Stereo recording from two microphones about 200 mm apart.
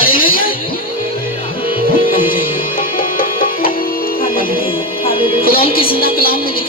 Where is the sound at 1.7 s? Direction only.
25° left (ahead or behind).